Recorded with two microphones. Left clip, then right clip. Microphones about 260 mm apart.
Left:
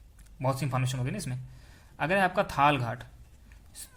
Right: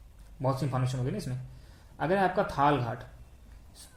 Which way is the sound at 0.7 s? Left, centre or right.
Left.